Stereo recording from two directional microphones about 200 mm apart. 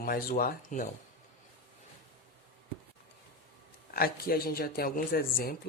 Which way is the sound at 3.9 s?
50° left (ahead or behind).